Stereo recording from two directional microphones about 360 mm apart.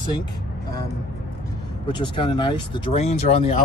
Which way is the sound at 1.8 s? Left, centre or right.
Centre.